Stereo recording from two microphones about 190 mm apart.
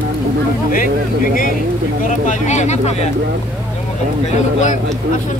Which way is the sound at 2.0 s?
40° left (ahead or behind).